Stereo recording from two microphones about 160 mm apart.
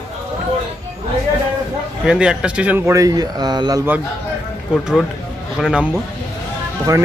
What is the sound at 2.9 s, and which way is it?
Speech, 20° right (ahead or behind).